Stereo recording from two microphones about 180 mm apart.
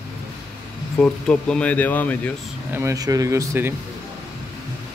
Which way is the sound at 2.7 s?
15° right (ahead or behind).